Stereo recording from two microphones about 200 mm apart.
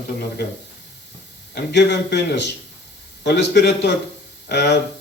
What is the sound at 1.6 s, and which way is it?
A man's voice, 55° left (ahead or behind).